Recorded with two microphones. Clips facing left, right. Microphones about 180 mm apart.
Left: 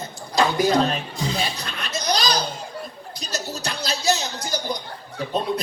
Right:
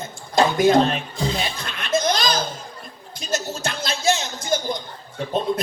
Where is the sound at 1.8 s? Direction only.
50° right (ahead or behind).